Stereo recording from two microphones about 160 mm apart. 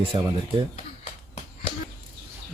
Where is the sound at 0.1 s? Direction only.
30° right (ahead or behind).